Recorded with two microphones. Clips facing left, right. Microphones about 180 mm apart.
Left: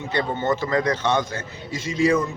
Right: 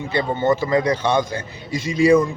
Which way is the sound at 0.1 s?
10° right (ahead or behind).